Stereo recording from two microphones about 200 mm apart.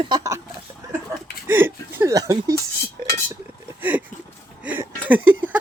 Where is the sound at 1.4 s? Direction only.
10° right (ahead or behind).